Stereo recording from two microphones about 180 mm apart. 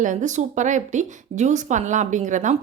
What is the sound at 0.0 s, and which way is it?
Speech, 45° right (ahead or behind).